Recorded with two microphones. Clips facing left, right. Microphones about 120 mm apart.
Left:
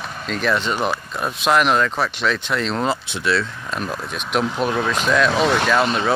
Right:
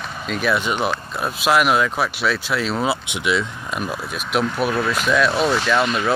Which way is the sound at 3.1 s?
15° right (ahead or behind).